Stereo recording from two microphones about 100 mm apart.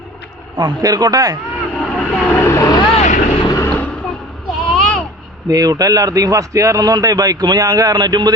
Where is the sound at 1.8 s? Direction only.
15° left (ahead or behind).